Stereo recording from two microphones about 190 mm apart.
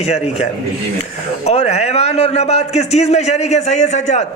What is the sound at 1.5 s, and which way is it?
A man's voice, 35° left (ahead or behind).